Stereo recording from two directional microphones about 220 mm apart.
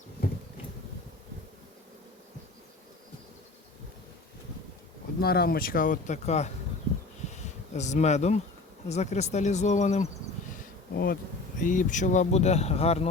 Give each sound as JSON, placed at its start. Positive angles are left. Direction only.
{"t": 5.2, "sound": "speech", "side_deg": 45}
{"t": 7.7, "sound": "speech", "side_deg": 30}
{"t": 10.9, "sound": "bee", "side_deg": 45}
{"t": 11.6, "sound": "speech", "side_deg": 35}